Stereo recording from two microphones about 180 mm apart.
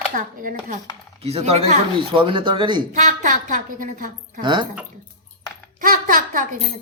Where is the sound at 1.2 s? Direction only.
35° right (ahead or behind).